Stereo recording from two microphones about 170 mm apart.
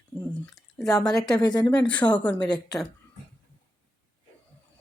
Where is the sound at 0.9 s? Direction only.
20° left (ahead or behind).